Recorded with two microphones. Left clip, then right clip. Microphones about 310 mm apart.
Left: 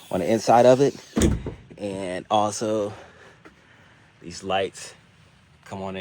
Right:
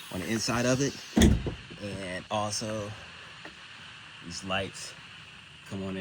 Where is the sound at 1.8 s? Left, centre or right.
Left.